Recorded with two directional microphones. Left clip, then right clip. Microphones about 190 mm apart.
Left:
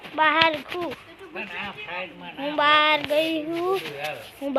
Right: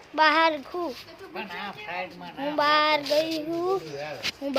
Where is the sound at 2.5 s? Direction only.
5° right (ahead or behind).